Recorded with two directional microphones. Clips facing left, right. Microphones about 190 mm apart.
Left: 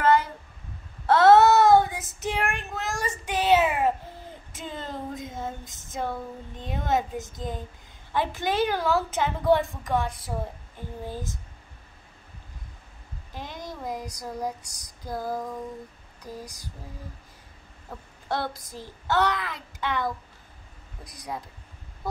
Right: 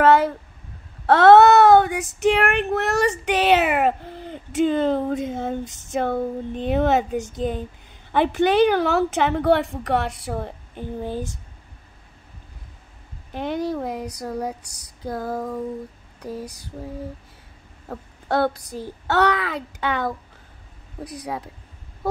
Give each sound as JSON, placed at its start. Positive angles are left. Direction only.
{"t": 0.0, "sound": "a sound", "side_deg": -70}
{"t": 1.0, "sound": "child singing", "side_deg": -70}
{"t": 13.3, "sound": "a child's voice", "side_deg": -65}
{"t": 17.8, "sound": "a child's voice", "side_deg": -60}
{"t": 21.0, "sound": "child singing", "side_deg": -65}